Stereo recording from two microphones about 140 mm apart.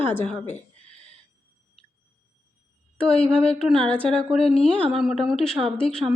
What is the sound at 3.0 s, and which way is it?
A woman's voice, 5° left (ahead or behind).